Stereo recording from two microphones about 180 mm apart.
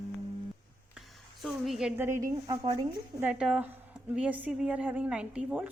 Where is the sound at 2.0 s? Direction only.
15° right (ahead or behind).